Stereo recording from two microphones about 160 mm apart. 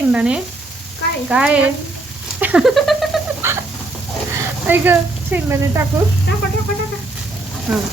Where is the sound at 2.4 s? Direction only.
5° right (ahead or behind).